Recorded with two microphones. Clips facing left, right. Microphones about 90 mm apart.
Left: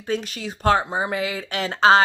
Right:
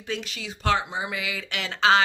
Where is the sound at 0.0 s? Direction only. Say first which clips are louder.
Left 6 dB; 40° left (ahead or behind).